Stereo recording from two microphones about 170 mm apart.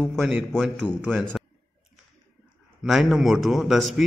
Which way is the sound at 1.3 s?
Centre (ahead or behind).